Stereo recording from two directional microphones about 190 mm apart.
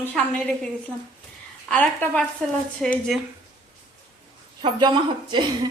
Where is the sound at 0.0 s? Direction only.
5° left (ahead or behind).